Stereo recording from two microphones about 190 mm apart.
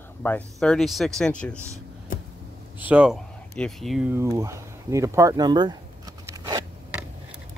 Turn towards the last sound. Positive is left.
turn(degrees=-20)  # may be behind; listen again after turning